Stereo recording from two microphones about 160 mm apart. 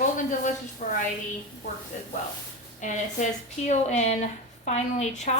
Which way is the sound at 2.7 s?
50° left (ahead or behind).